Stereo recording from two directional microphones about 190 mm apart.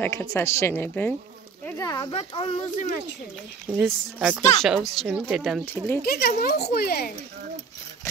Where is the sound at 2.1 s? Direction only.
30° left (ahead or behind).